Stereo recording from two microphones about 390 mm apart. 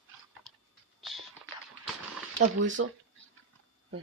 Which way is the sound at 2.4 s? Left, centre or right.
Right.